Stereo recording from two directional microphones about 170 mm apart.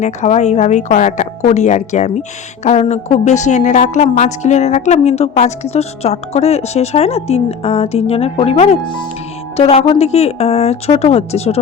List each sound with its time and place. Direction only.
0.0 s a woman's voice: 45° left (ahead or behind)